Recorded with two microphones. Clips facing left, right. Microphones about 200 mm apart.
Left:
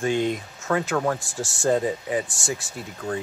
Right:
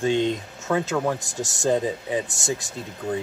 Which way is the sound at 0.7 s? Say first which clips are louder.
Even; 10° right (ahead or behind).